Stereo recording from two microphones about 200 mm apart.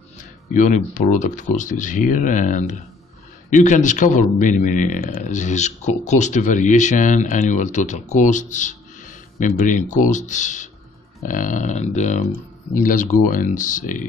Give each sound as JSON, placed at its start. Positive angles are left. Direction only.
{"t": 0.2, "sound": "a man's voice", "side_deg": 35}